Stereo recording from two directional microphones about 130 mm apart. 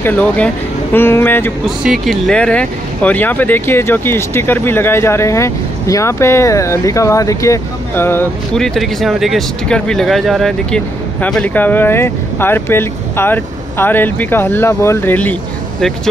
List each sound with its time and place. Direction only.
0.0 s speech: 10° left (ahead or behind)
1.8 s speech: centre (ahead or behind); by 8.3 s 15° left (ahead or behind)
8.5 s speech: 5° left (ahead or behind)